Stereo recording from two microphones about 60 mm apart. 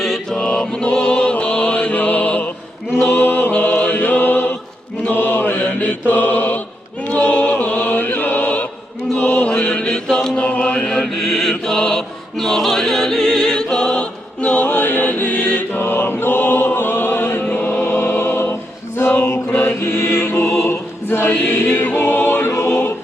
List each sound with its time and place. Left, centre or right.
0.0 s mantra: centre
0.3 s music: centre
3.1 s mantra: left
5.5 s mantra: left
7.1 s chant: left
10.8 s choir: centre; by 17.9 s left
17.9 s music: left
18.9 s chant: left